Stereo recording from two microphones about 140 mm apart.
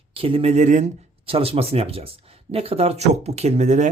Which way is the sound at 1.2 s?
40° right (ahead or behind).